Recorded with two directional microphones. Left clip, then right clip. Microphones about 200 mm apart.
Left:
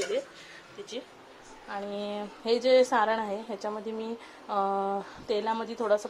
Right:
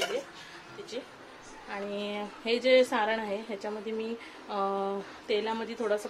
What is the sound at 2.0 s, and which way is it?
A woman's voice, 15° left (ahead or behind).